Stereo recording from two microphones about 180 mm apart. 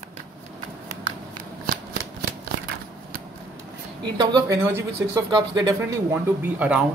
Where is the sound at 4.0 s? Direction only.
25° right (ahead or behind).